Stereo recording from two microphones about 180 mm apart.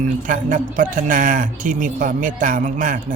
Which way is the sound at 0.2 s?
50° right (ahead or behind).